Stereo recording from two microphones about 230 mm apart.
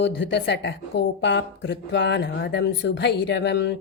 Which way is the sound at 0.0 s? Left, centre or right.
Left.